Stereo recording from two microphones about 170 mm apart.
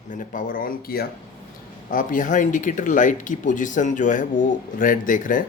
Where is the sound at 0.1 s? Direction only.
50° left (ahead or behind).